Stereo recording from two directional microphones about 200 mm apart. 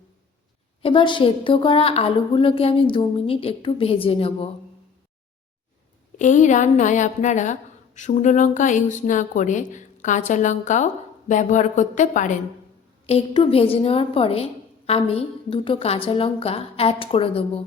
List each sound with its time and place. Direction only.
0.8 s a woman's voice: 25° left (ahead or behind)
6.1 s speech: 40° left (ahead or behind)
13.1 s a woman's voice: 30° left (ahead or behind)